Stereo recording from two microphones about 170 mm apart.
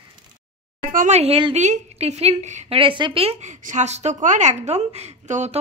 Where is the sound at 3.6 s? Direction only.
45° right (ahead or behind).